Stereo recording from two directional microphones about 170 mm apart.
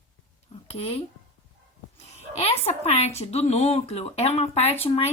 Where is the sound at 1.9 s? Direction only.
35° left (ahead or behind).